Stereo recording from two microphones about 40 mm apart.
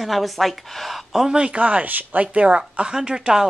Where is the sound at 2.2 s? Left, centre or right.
Right.